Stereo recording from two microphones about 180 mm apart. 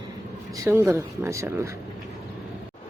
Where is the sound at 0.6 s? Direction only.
15° right (ahead or behind).